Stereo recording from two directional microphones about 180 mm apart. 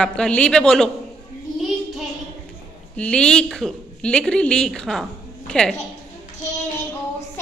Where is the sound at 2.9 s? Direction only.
5° left (ahead or behind).